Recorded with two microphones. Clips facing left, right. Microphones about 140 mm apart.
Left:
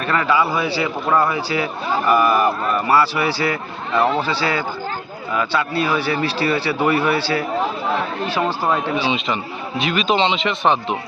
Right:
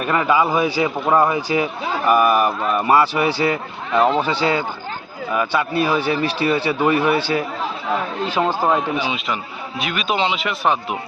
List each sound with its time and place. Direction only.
0.0 s a man's voice: 15° right (ahead or behind)
9.0 s a man's voice: 5° right (ahead or behind)